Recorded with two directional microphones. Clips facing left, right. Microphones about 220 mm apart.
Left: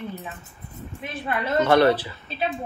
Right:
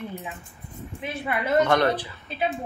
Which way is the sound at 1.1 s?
10° right (ahead or behind).